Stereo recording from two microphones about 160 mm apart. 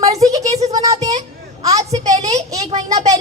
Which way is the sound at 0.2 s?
20° right (ahead or behind).